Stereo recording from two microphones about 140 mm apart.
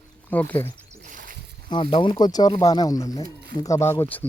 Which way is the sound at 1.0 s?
75° right (ahead or behind).